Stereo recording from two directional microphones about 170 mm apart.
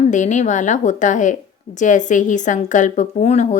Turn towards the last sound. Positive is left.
turn(degrees=45)  # may be behind; listen again after turning